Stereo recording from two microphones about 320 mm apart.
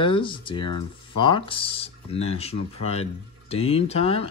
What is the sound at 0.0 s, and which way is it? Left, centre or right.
Speech, centre.